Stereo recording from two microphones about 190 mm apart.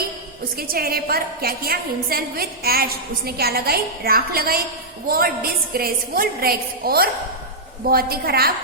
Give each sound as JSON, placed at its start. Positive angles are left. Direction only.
{"t": 0.5, "sound": "a woman's voice", "side_deg": -50}